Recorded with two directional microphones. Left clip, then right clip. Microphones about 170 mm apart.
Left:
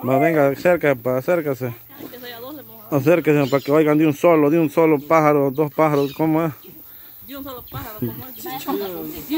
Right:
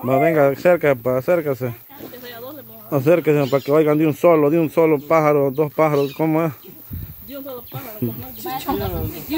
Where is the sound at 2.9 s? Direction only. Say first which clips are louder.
Even; 15° left (ahead or behind).